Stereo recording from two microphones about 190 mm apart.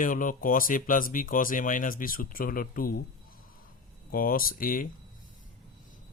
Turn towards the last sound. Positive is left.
turn(degrees=50)  # may be behind; listen again after turning